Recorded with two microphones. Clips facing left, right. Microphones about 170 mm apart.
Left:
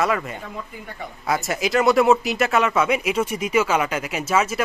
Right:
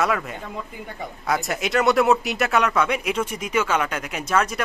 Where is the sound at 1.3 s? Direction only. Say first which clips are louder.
Left 2 dB; centre (ahead or behind).